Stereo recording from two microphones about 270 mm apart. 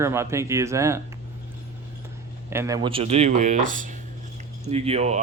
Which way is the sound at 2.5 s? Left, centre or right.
Centre.